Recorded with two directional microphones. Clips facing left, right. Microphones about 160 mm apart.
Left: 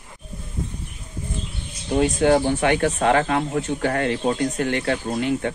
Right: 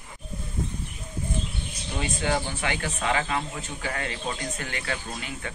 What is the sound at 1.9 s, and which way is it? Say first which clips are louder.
Speech: left 11 dB; 60° left (ahead or behind).